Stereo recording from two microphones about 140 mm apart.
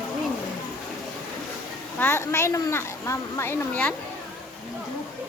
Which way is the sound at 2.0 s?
20° left (ahead or behind).